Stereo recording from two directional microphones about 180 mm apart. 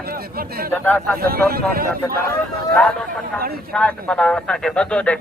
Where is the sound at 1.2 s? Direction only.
55° right (ahead or behind).